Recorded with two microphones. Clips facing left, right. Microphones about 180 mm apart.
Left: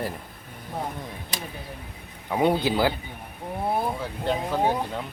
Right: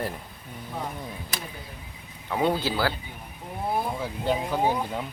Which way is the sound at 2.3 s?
20° left (ahead or behind).